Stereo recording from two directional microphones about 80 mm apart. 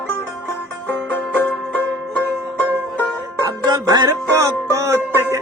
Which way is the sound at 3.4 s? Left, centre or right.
Right.